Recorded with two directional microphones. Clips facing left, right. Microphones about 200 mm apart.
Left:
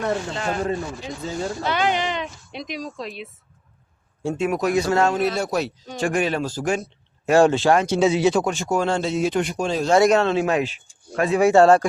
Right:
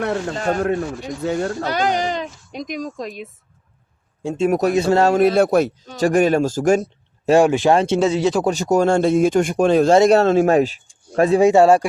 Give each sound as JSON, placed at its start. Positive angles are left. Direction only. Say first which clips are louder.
{"t": 0.0, "sound": "speech", "louder": "right 3 dB", "side_deg": -65}
{"t": 0.3, "sound": "speech", "louder": "right 5 dB", "side_deg": -45}
{"t": 1.2, "sound": "speech", "louder": "right 6 dB", "side_deg": -65}
{"t": 1.6, "sound": "a woman's voice", "louder": "left 1 dB", "side_deg": -40}
{"t": 4.2, "sound": "speech", "louder": "right 2 dB", "side_deg": -15}
{"t": 4.4, "sound": "speech", "louder": "right 5 dB", "side_deg": -35}
{"t": 5.1, "sound": "speech", "louder": "right 8 dB", "side_deg": -55}
{"t": 6.0, "sound": "speech", "louder": "right 7 dB", "side_deg": -40}
{"t": 7.3, "sound": "speech", "louder": "right 2 dB", "side_deg": -15}
{"t": 7.9, "sound": "speech", "louder": "right 1 dB", "side_deg": 5}
{"t": 8.4, "sound": "speech", "louder": "right 6 dB", "side_deg": -40}
{"t": 9.9, "sound": "speech", "louder": "even", "side_deg": -30}
{"t": 11.4, "sound": "speech", "louder": "even", "side_deg": -10}